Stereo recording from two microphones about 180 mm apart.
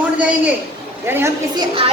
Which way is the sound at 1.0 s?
10° right (ahead or behind).